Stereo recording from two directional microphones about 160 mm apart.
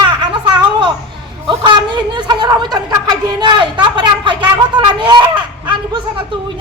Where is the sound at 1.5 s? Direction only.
30° right (ahead or behind).